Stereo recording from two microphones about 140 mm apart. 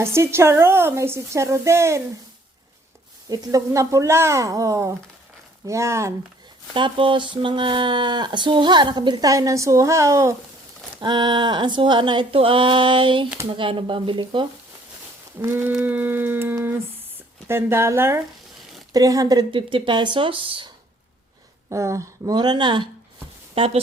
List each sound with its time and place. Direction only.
0.0 s a woman's voice: 20° right (ahead or behind)
3.2 s a woman's voice: 25° right (ahead or behind)
6.7 s speech: 35° right (ahead or behind)
15.4 s a sound: 15° right (ahead or behind)
18.9 s speech: 25° right (ahead or behind)
21.7 s a woman's voice: 20° right (ahead or behind); by 23.8 s 45° right (ahead or behind)